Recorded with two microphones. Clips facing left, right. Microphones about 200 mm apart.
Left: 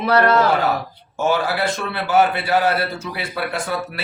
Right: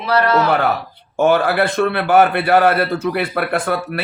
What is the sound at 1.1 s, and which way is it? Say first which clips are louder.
A man's voice: right 6 dB; 60° right (ahead or behind).